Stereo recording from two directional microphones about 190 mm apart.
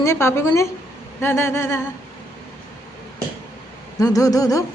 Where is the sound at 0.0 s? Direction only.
15° left (ahead or behind).